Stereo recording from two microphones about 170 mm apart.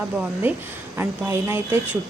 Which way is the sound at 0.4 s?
10° right (ahead or behind).